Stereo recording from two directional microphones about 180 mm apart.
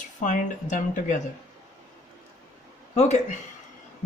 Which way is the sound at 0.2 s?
45° left (ahead or behind).